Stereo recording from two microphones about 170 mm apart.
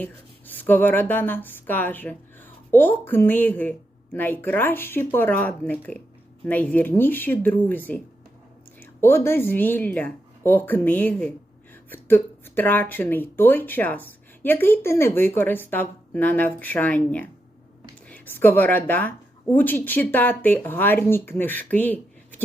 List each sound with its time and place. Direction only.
0.0 s speech: 10° left (ahead or behind)